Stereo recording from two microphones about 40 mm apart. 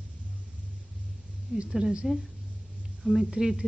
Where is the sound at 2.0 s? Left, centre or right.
Centre.